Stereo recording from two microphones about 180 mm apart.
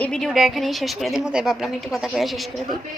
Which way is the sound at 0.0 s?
Centre (ahead or behind).